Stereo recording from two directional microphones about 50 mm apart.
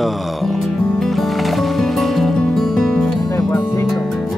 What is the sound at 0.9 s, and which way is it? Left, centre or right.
Music, centre.